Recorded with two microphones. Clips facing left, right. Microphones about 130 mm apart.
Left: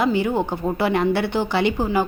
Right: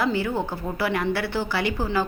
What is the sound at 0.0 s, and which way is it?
A woman's voice, 20° left (ahead or behind).